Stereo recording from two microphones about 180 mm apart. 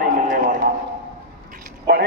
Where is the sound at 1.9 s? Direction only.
75° right (ahead or behind).